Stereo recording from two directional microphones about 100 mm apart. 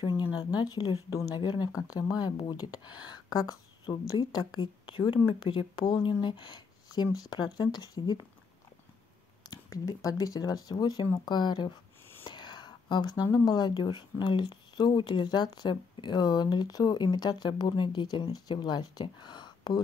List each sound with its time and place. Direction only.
0.2 s speech: 50° left (ahead or behind)
9.4 s speech: 40° left (ahead or behind)